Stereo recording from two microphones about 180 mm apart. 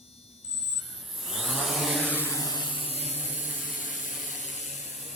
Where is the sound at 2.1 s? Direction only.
15° left (ahead or behind).